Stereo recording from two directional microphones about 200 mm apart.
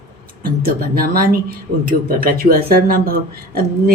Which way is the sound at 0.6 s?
50° right (ahead or behind).